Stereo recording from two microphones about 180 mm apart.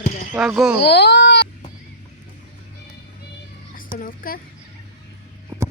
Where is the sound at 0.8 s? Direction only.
65° left (ahead or behind).